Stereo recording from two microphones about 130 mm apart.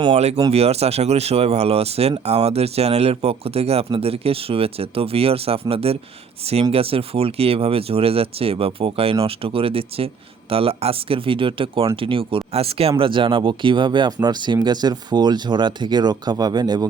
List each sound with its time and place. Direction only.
0.1 s speech: 55° right (ahead or behind); by 16.8 s 35° right (ahead or behind)